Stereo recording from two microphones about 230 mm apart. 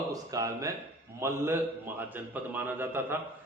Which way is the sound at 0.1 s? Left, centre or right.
Centre.